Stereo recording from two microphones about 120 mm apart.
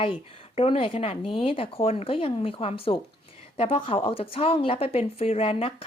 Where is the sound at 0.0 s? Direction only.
55° left (ahead or behind).